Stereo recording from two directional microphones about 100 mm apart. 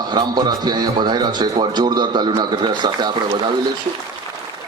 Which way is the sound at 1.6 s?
45° right (ahead or behind).